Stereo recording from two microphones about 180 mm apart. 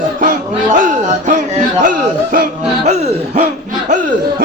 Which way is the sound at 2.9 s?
40° right (ahead or behind).